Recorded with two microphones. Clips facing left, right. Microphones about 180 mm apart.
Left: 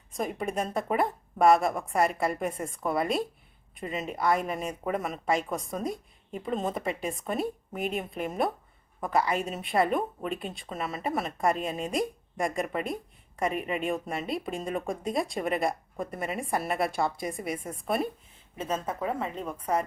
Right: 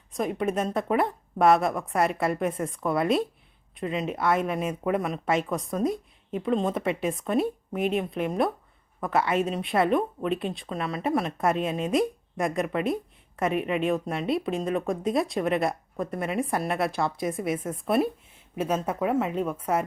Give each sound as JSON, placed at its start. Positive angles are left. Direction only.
{"t": 0.1, "sound": "speech", "side_deg": 0}